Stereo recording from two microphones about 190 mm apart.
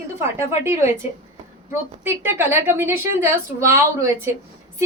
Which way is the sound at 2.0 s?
10° right (ahead or behind).